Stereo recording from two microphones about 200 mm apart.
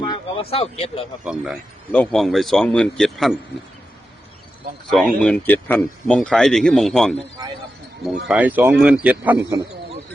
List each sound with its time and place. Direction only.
0.0 s speech: 25° left (ahead or behind)
1.2 s speech: 5° right (ahead or behind)
4.9 s speech: centre (ahead or behind)
8.3 s speech: 5° right (ahead or behind)